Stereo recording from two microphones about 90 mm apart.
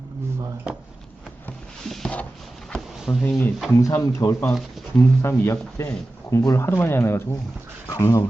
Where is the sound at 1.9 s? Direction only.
5° left (ahead or behind).